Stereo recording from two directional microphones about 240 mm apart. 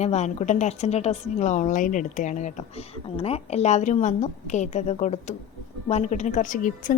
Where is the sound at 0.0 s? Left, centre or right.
Left.